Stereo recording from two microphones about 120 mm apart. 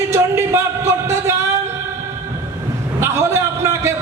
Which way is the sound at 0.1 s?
20° right (ahead or behind).